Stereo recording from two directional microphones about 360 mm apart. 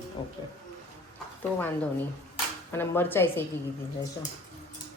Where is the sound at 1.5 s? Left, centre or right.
Centre.